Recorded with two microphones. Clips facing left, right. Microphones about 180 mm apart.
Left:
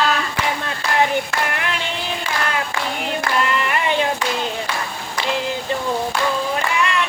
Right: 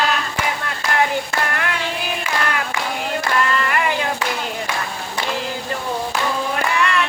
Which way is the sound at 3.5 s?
20° left (ahead or behind).